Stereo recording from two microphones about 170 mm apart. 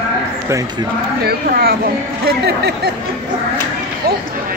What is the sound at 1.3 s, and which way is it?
Speech, 60° right (ahead or behind).